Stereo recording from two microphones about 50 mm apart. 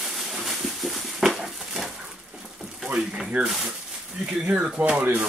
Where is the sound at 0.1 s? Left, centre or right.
Centre.